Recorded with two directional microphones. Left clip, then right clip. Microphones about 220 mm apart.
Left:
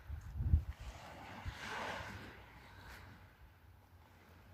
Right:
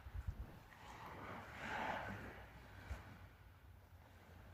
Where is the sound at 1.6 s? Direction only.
45° left (ahead or behind).